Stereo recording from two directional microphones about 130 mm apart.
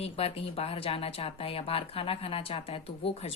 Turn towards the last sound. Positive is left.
turn(degrees=45)  # may be behind; listen again after turning